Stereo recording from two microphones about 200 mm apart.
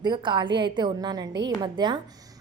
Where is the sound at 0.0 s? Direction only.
20° right (ahead or behind).